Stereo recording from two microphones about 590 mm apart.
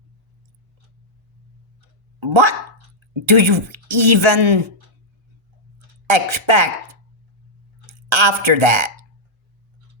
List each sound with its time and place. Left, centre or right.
2.2 s speech: right
6.1 s speech: right
7.9 s speech: right